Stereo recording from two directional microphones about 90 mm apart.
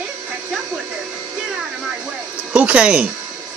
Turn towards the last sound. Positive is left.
turn(degrees=-10)  # may be behind; listen again after turning